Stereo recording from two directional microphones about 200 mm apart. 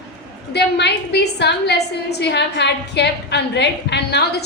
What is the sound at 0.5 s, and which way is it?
A woman's voice, 55° left (ahead or behind).